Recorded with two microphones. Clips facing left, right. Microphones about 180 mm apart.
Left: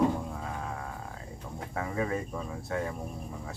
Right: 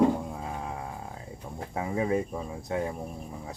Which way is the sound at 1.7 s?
20° right (ahead or behind).